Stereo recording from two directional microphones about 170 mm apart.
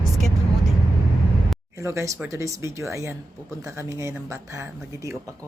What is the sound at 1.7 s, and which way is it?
Speech, 15° right (ahead or behind).